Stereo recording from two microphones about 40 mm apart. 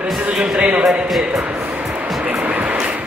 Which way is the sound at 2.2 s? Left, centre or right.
Right.